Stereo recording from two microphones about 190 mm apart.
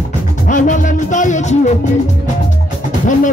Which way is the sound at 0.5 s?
40° left (ahead or behind).